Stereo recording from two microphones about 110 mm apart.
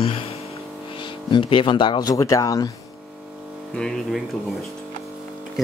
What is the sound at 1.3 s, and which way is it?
Speech, 50° left (ahead or behind).